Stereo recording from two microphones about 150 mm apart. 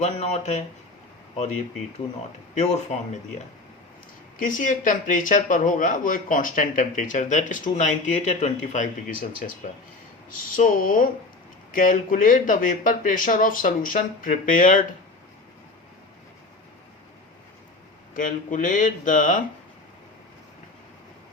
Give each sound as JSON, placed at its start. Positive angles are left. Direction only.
{"t": 0.0, "sound": "speech", "side_deg": 50}
{"t": 2.6, "sound": "speech", "side_deg": 50}
{"t": 4.4, "sound": "speech", "side_deg": 60}
{"t": 18.1, "sound": "speech", "side_deg": 60}